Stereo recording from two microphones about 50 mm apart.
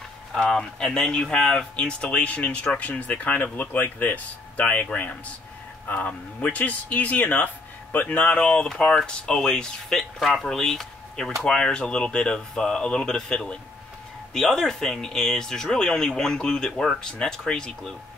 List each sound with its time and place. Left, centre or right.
0.4 s speech: centre